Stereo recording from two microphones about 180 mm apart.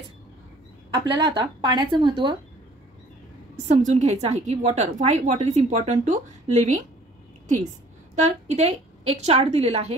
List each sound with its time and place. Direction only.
0.9 s speech: 25° right (ahead or behind)
3.5 s a woman's voice: 40° right (ahead or behind)
8.2 s a woman's voice: 40° right (ahead or behind)